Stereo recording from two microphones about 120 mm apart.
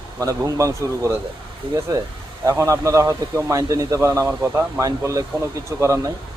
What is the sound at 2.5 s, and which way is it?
A man's voice, 25° right (ahead or behind).